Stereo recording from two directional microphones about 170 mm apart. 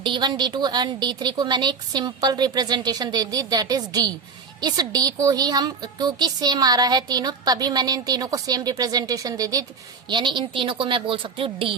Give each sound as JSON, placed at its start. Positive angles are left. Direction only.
{"t": 0.0, "sound": "a woman's voice", "side_deg": -25}